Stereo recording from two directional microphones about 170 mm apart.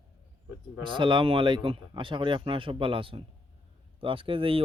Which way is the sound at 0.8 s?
30° right (ahead or behind).